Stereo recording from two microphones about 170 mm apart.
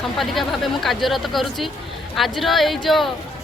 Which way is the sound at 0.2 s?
Centre (ahead or behind).